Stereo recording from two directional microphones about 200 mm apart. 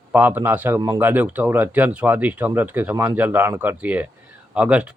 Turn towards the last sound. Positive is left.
turn(degrees=-5)  # may be behind; listen again after turning